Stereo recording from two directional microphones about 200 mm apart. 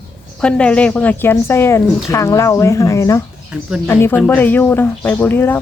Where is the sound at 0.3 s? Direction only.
5° left (ahead or behind).